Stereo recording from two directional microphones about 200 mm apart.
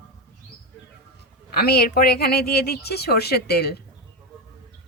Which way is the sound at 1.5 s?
50° left (ahead or behind).